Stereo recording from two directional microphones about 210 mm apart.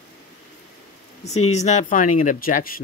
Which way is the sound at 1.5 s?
30° left (ahead or behind).